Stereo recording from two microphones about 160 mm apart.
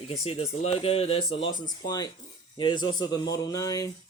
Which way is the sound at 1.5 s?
55° left (ahead or behind).